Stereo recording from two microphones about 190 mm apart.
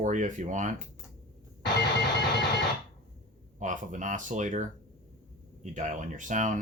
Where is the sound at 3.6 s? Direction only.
40° right (ahead or behind).